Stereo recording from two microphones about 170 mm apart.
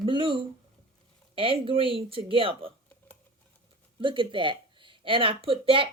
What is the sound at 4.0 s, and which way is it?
Speech, 30° right (ahead or behind).